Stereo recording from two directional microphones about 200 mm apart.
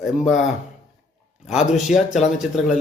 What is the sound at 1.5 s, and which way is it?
Speech, centre (ahead or behind).